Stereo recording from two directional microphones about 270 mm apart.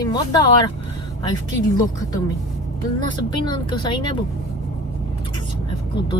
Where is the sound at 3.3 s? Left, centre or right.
Centre.